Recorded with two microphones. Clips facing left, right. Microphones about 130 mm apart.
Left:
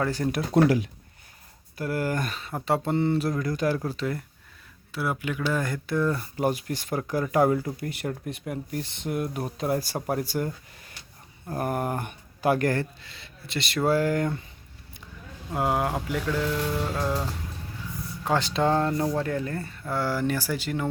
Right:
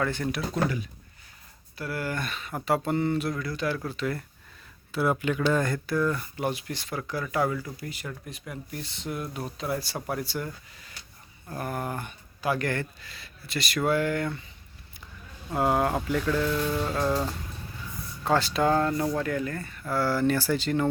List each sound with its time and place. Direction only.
0.0 s speech: 40° left (ahead or behind)
1.8 s speech: 45° left (ahead or behind)
4.0 s speech: 20° left (ahead or behind)
4.9 s speech: centre (ahead or behind); by 14.3 s 40° left (ahead or behind)
15.5 s speech: 15° left (ahead or behind)
18.3 s speech: 20° left (ahead or behind)
19.8 s speech: 15° left (ahead or behind)